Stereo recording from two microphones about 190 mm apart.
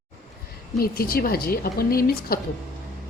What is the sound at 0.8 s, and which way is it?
Speech, 50° left (ahead or behind).